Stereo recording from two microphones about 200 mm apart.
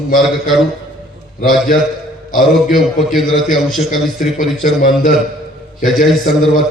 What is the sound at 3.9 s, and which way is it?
A man's voice, 45° left (ahead or behind).